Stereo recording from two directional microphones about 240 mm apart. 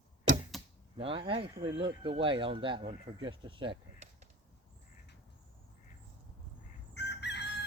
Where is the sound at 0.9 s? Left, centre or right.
Right.